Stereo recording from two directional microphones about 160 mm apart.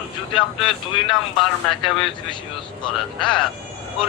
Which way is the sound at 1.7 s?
Centre (ahead or behind).